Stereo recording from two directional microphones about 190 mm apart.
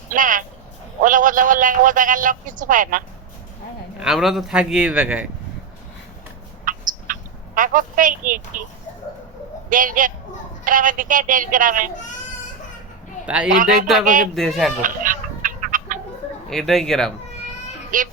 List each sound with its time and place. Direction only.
0.1 s a sound: 45° right (ahead or behind)
1.0 s a man's voice: 45° right (ahead or behind)
4.0 s speech: centre (ahead or behind)
6.7 s a sound: 45° right (ahead or behind)
9.6 s a man's voice: 45° right (ahead or behind)
13.2 s a man's voice: 5° right (ahead or behind)
13.5 s a man's voice: 45° right (ahead or behind)
14.3 s speech: centre (ahead or behind)
14.8 s music: 45° right (ahead or behind)
16.5 s speech: centre (ahead or behind)
17.9 s a man's voice: 45° right (ahead or behind)